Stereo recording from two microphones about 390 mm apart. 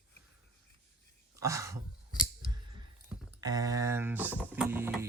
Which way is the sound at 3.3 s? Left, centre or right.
Centre.